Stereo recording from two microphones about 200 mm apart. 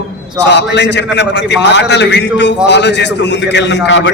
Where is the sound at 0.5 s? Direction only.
60° left (ahead or behind).